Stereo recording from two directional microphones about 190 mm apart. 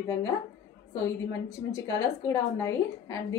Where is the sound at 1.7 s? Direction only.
15° left (ahead or behind).